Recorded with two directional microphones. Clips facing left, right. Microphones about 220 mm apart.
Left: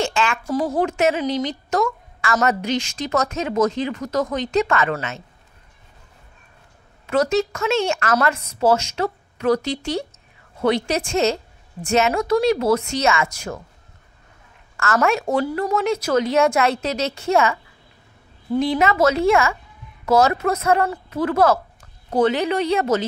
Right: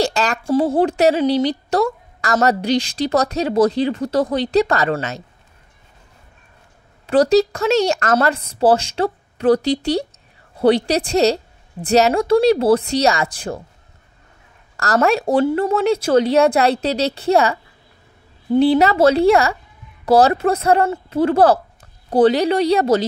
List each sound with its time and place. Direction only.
0.0 s a woman's voice: 40° right (ahead or behind)
7.1 s a woman's voice: 35° right (ahead or behind)
14.8 s a woman's voice: 35° right (ahead or behind)